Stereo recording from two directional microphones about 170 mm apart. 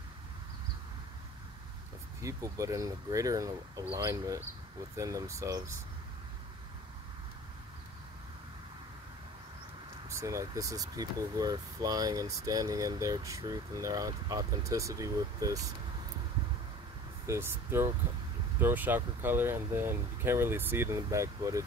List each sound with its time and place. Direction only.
2.2 s speech: 20° right (ahead or behind)
10.0 s speech: 20° right (ahead or behind)
17.3 s speech: 15° right (ahead or behind)